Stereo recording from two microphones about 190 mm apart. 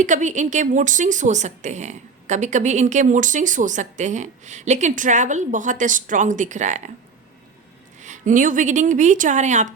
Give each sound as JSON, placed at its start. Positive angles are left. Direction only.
{"t": 0.0, "sound": "a woman's voice", "side_deg": -40}
{"t": 8.0, "sound": "a woman's voice", "side_deg": -40}